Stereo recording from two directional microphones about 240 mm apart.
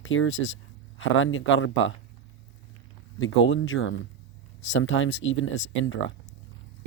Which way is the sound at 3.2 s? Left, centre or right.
Left.